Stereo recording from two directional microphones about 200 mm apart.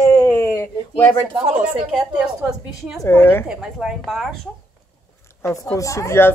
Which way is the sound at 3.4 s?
5° right (ahead or behind).